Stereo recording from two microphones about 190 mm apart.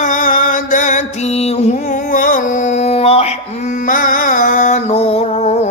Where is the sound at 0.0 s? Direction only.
45° left (ahead or behind).